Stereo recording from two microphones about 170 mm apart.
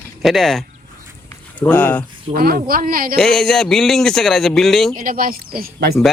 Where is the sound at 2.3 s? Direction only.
60° right (ahead or behind).